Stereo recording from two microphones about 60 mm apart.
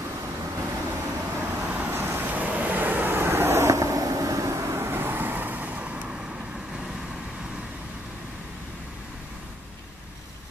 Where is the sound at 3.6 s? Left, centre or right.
Right.